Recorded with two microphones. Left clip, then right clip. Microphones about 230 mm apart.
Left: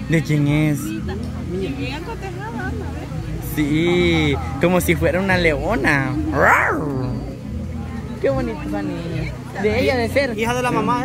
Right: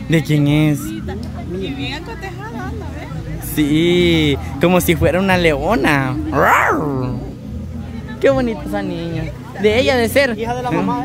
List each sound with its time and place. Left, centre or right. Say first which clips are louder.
0.1 s speech: right 4 dB; centre
3.5 s speech: right 4 dB; right
8.2 s speech: right 6 dB; right
10.4 s speech: left 1 dB; left